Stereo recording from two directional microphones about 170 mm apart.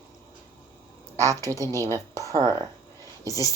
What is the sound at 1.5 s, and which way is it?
Speech, 20° right (ahead or behind).